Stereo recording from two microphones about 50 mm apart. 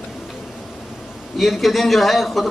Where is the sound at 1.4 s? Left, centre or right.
Centre.